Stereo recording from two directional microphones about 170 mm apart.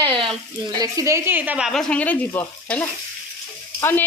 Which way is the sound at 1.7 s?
5° left (ahead or behind).